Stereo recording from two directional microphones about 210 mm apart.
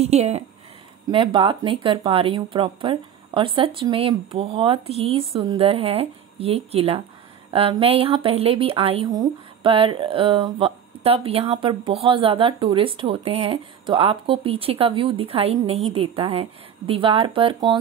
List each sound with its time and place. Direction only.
0.0 s speech: 30° right (ahead or behind)